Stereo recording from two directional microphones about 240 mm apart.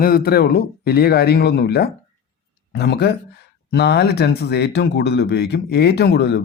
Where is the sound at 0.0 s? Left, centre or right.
Left.